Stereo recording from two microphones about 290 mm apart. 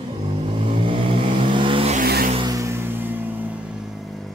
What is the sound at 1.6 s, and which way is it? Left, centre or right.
Vehicle, centre.